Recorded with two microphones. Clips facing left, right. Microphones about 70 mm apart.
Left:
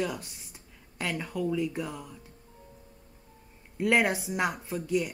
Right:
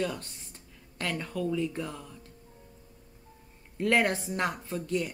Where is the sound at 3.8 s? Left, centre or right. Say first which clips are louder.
Left 1 dB; centre.